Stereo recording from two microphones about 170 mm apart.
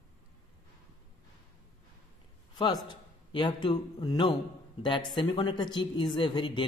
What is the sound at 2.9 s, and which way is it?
A man's voice, 25° left (ahead or behind).